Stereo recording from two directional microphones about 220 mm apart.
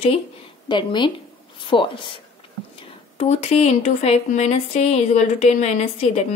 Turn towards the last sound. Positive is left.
turn(degrees=30)  # may be behind; listen again after turning